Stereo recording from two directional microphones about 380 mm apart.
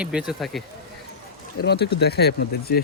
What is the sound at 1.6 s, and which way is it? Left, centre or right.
Speech, left.